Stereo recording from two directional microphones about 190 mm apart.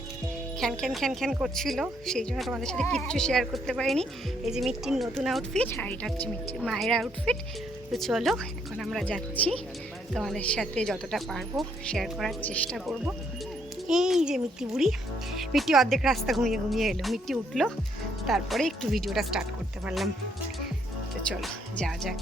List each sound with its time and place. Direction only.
0.6 s speech: centre (ahead or behind)
21.4 s speech: centre (ahead or behind)